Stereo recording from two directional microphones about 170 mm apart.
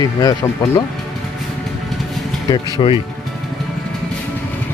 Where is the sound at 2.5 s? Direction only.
30° left (ahead or behind).